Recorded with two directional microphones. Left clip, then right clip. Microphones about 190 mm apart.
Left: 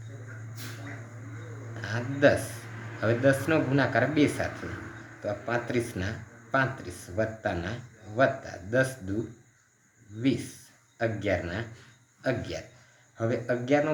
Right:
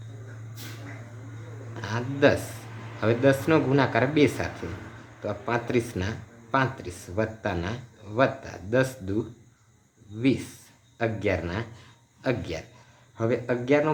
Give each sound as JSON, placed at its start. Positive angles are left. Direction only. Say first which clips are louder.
{"t": 1.8, "sound": "speech", "louder": "right 1 dB", "side_deg": -45}
{"t": 10.9, "sound": "speech", "louder": "right 2 dB", "side_deg": -45}